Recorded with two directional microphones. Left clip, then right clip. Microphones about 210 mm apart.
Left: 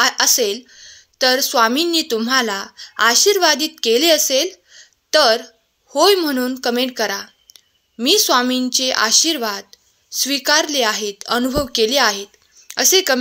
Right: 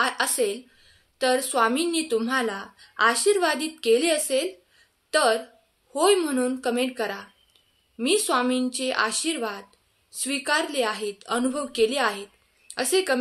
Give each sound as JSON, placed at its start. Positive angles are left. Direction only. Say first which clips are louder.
{"t": 0.2, "sound": "speech", "louder": "left 8 dB", "side_deg": 40}
{"t": 4.3, "sound": "a sound", "louder": "left 7 dB", "side_deg": 40}
{"t": 5.9, "sound": "a woman's voice", "louder": "left 7 dB", "side_deg": 40}